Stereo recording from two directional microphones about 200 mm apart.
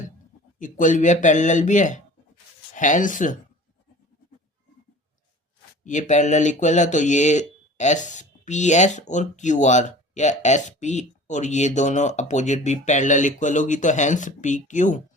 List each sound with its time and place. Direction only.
0.6 s speech: 40° left (ahead or behind)
5.8 s speech: 40° left (ahead or behind)